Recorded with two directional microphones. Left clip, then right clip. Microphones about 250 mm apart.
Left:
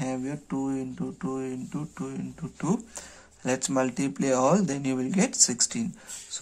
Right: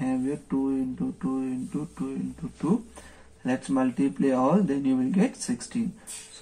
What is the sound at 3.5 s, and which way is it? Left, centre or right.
Speech, left.